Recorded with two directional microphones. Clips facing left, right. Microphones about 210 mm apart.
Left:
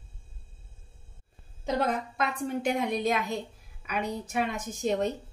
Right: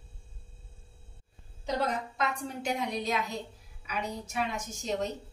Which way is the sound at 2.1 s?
55° left (ahead or behind).